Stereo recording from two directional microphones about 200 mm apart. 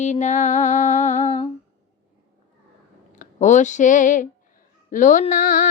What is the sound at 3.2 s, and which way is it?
Speech, 40° left (ahead or behind).